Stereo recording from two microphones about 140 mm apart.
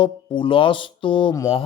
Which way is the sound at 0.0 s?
35° left (ahead or behind).